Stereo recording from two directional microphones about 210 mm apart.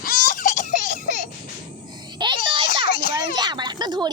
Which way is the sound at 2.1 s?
20° right (ahead or behind).